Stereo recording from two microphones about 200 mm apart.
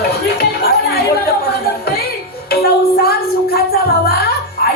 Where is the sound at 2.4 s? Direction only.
50° left (ahead or behind).